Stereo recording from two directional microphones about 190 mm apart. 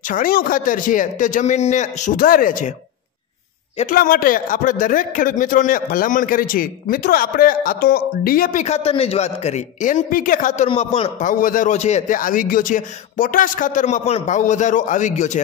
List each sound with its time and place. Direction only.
0.1 s a man's voice: 50° left (ahead or behind)
3.7 s a man's voice: 45° left (ahead or behind)
10.7 s a man's voice: 30° left (ahead or behind)
11.2 s a man's voice: 45° left (ahead or behind)